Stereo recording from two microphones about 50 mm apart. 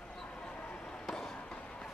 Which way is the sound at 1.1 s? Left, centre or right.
Centre.